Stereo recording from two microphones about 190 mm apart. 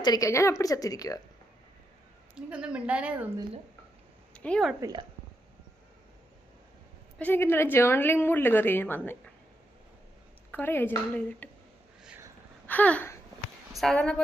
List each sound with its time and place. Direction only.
0.0 s a woman's voice: 20° left (ahead or behind)
2.3 s a woman's voice: 5° right (ahead or behind)
4.4 s a woman's voice: 5° left (ahead or behind)
4.8 s speech: 20° right (ahead or behind)
7.2 s a woman's voice: 10° left (ahead or behind)
10.5 s a woman's voice: 10° left (ahead or behind)
12.0 s a sound: 10° right (ahead or behind)
12.6 s a sound: 10° left (ahead or behind)
13.7 s speech: 5° left (ahead or behind)